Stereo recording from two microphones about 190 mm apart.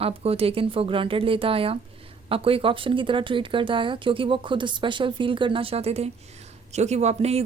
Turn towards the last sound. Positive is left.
turn(degrees=-35)  # may be behind; listen again after turning